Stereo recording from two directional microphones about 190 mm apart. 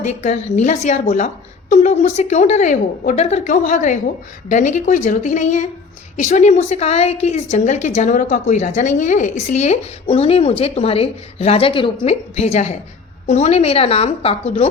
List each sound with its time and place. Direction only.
0.0 s a woman's voice: 35° left (ahead or behind)